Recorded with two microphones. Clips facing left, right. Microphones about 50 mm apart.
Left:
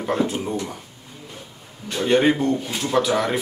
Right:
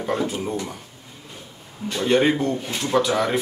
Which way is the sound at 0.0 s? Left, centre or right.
Centre.